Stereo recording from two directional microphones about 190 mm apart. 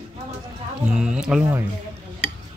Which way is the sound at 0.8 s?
5° right (ahead or behind).